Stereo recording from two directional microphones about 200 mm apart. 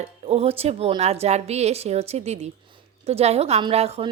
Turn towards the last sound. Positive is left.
turn(degrees=-30)  # may be behind; listen again after turning